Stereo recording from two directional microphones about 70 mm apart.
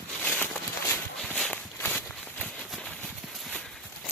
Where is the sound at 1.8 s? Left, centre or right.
Left.